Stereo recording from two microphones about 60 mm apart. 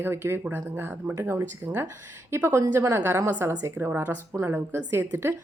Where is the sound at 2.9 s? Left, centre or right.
Right.